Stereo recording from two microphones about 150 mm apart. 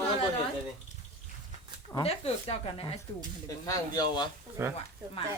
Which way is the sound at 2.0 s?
40° left (ahead or behind).